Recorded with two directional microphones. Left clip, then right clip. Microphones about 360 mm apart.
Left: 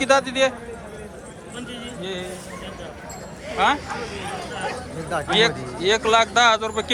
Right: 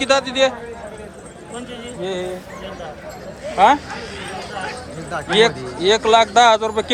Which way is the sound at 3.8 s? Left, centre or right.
Centre.